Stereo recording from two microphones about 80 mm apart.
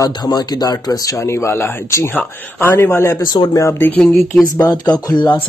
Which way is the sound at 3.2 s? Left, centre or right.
Left.